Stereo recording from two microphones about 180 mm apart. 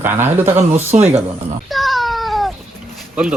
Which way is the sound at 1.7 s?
Centre (ahead or behind).